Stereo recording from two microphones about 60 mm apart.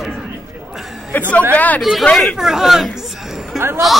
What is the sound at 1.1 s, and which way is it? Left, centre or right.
Speech, left.